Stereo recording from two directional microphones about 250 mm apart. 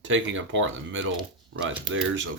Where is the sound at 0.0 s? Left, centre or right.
Right.